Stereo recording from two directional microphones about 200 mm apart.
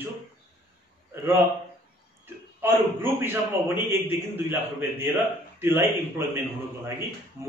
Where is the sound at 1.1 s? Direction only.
10° right (ahead or behind).